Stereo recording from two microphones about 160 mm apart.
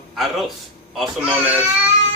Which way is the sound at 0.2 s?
Centre (ahead or behind).